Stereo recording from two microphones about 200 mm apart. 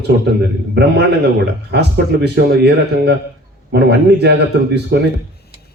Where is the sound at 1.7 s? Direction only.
55° right (ahead or behind).